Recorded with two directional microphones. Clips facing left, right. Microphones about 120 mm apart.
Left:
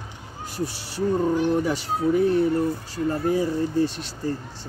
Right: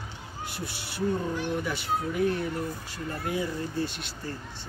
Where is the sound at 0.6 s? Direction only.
35° left (ahead or behind).